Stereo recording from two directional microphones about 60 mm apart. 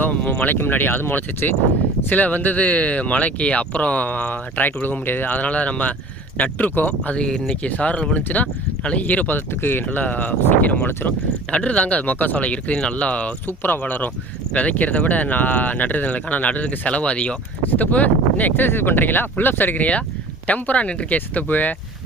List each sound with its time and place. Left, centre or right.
0.0 s a sound: left
0.5 s speech: left; by 7.4 s centre
7.4 s speech: left